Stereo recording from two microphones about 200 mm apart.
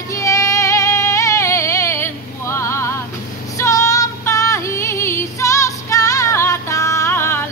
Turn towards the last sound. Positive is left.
turn(degrees=10)  # may be behind; listen again after turning